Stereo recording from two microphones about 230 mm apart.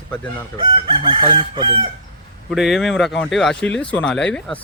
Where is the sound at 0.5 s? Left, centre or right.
Right.